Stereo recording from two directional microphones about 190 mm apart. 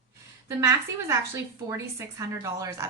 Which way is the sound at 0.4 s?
15° right (ahead or behind).